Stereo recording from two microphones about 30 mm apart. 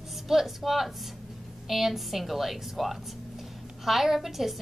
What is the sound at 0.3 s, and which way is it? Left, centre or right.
A woman's voice, centre.